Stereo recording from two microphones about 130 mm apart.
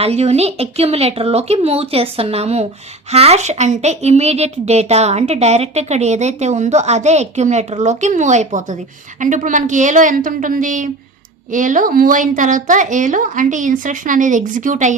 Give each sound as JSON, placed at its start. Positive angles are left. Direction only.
{"t": 0.0, "sound": "a woman's voice", "side_deg": -55}